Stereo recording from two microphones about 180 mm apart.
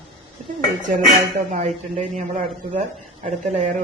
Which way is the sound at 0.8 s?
45° right (ahead or behind).